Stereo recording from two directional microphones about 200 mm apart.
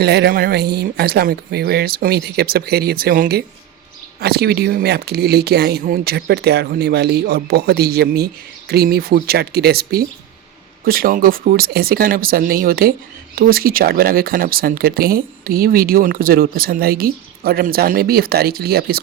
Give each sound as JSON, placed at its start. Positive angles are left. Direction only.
{"t": 0.0, "sound": "speech", "side_deg": -55}